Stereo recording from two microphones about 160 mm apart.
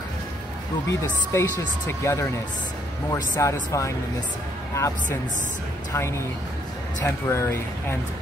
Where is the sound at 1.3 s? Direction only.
15° left (ahead or behind).